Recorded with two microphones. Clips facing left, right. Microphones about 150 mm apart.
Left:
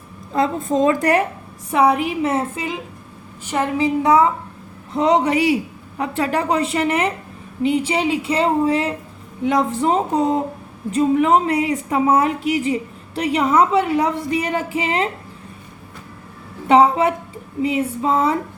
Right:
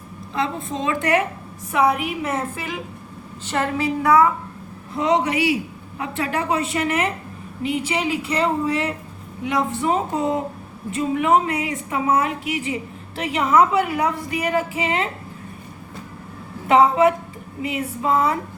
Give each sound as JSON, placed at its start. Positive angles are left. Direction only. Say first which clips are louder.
{"t": 0.3, "sound": "a woman's voice", "louder": "left 7 dB", "side_deg": 45}
{"t": 4.9, "sound": "a woman's voice", "louder": "left 3 dB", "side_deg": 35}
{"t": 17.6, "sound": "a woman's voice", "louder": "left 5 dB", "side_deg": 30}